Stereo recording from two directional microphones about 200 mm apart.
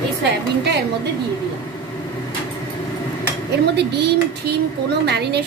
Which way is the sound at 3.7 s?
55° right (ahead or behind).